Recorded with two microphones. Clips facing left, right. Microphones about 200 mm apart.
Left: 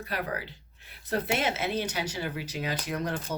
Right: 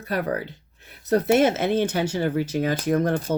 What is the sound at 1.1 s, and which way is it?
Speech, 45° right (ahead or behind).